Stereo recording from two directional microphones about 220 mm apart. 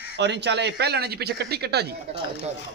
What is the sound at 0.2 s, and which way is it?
Speech, 50° right (ahead or behind).